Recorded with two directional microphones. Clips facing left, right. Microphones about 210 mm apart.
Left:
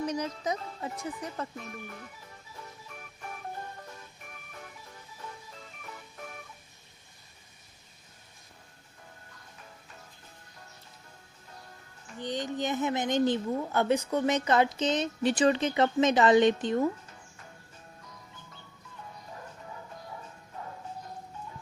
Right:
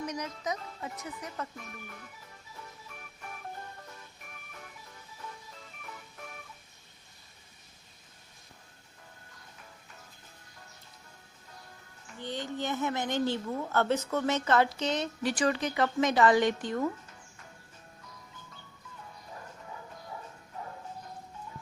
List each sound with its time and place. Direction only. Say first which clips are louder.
0.0 s speech: left 4 dB; 30° left (ahead or behind)
12.2 s a woman's voice: left 3 dB; 15° left (ahead or behind)